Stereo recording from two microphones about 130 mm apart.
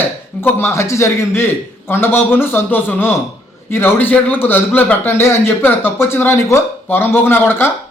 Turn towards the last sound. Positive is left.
turn(degrees=15)  # may be behind; listen again after turning